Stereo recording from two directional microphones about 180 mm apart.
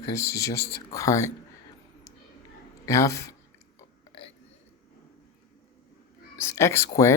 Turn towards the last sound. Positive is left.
turn(degrees=15)  # may be behind; listen again after turning